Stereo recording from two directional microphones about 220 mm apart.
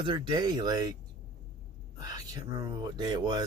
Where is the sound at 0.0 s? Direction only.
20° right (ahead or behind).